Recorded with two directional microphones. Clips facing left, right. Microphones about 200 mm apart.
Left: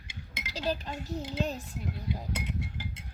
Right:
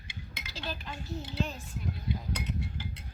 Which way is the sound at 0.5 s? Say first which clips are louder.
Left 7 dB; 35° left (ahead or behind).